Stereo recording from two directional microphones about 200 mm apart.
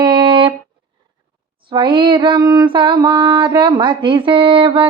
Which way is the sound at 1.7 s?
25° right (ahead or behind).